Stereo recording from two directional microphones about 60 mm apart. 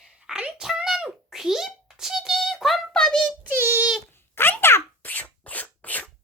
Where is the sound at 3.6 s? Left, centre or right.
Right.